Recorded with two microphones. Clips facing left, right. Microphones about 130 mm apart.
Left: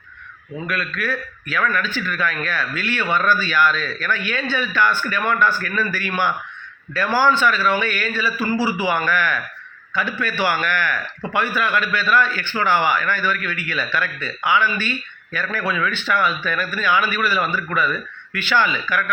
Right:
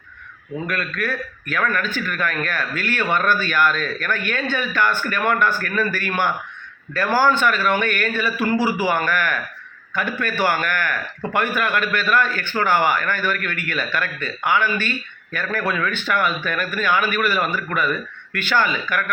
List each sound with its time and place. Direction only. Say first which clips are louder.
0.7 s a man's voice: left 1 dB; 50° right (ahead or behind)